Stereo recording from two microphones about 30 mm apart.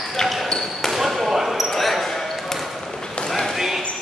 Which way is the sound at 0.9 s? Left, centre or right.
Centre.